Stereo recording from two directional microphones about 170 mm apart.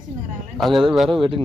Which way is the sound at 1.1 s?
30° right (ahead or behind).